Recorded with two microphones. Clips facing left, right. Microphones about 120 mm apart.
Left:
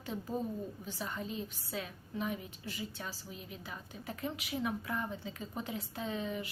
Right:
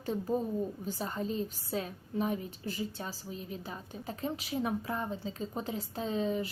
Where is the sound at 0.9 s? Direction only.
40° right (ahead or behind).